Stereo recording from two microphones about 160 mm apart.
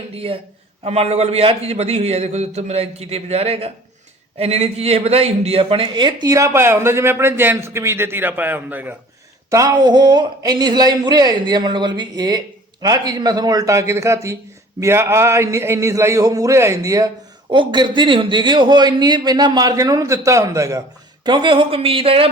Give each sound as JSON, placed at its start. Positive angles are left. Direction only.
{"t": 0.1, "sound": "a man's voice", "side_deg": -35}
{"t": 9.5, "sound": "a man's voice", "side_deg": -20}
{"t": 21.2, "sound": "a man's voice", "side_deg": -30}